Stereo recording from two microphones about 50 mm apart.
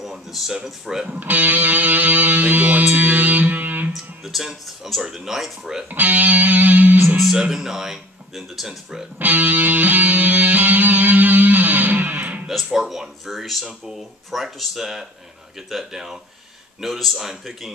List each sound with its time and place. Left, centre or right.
0.0 s a sound: centre
0.7 s speech: centre
1.0 s music: right
3.9 s guitar: centre
5.0 s speech: centre
5.9 s music: right
7.3 s speech: centre
9.2 s music: right
12.7 s speech: centre